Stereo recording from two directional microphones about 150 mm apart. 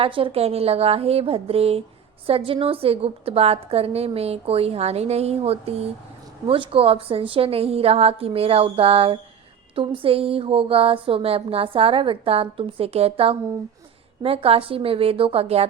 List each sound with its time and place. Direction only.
0.0 s a woman's voice: 40° right (ahead or behind)